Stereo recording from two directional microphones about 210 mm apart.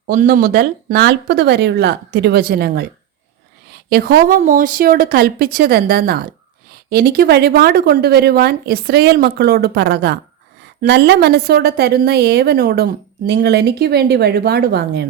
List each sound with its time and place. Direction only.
0.1 s a woman's voice: 40° right (ahead or behind)
3.8 s a woman's voice: 45° right (ahead or behind)